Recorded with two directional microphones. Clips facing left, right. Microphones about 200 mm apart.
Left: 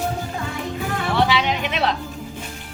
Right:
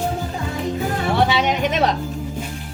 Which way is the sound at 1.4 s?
45° right (ahead or behind).